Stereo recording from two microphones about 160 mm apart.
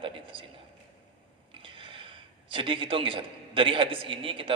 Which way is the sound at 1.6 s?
30° right (ahead or behind).